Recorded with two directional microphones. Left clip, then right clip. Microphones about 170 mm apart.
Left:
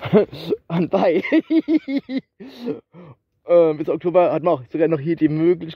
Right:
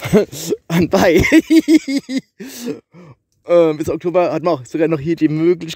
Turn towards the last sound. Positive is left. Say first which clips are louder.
# right 3 dB
turn(degrees=-30)  # may be behind; listen again after turning